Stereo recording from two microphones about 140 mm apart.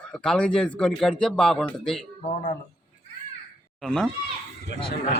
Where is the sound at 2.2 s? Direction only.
60° left (ahead or behind).